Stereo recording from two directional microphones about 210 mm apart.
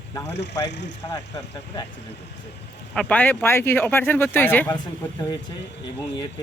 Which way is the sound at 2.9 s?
5° left (ahead or behind).